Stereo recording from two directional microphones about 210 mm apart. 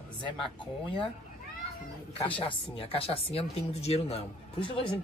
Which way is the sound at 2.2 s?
25° left (ahead or behind).